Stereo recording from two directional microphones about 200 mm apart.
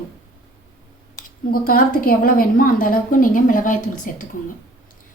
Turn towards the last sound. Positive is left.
turn(degrees=40)  # may be behind; listen again after turning